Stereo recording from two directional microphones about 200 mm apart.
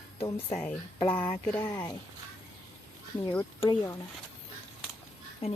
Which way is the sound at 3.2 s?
20° left (ahead or behind).